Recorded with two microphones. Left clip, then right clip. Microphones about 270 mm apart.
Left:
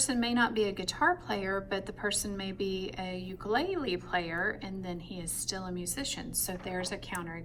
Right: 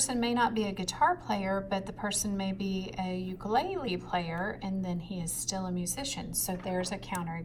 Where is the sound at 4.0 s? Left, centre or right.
Right.